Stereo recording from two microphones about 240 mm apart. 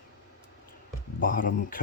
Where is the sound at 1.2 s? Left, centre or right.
Left.